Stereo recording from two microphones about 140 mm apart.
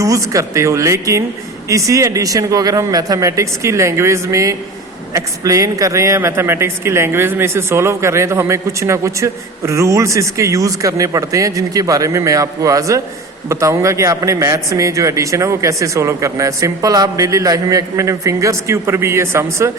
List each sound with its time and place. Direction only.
0.0 s speech: 25° right (ahead or behind)